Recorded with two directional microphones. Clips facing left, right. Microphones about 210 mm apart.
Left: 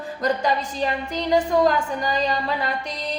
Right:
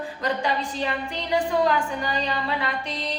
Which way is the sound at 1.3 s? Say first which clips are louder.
Left 3 dB; 40° left (ahead or behind).